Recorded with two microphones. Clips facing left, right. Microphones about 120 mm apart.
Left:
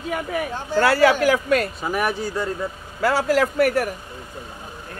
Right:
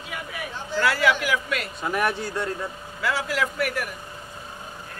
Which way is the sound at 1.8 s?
5° left (ahead or behind).